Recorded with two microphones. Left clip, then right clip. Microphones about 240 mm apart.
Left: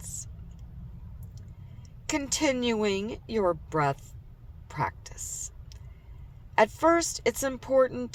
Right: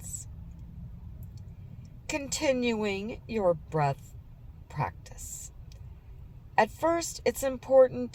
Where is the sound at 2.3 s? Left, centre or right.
Left.